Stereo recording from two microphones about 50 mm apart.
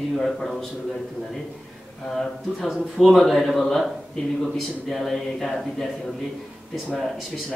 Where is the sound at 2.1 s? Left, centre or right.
Centre.